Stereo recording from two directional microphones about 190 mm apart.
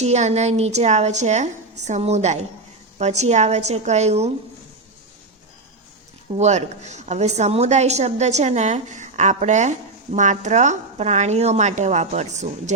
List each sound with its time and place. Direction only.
0.0 s a woman's voice: 35° right (ahead or behind)
6.3 s a woman's voice: 35° right (ahead or behind)